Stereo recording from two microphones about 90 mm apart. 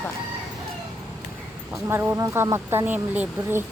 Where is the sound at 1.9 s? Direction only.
25° right (ahead or behind).